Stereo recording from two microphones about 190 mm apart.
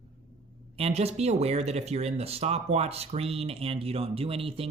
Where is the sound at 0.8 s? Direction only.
35° right (ahead or behind).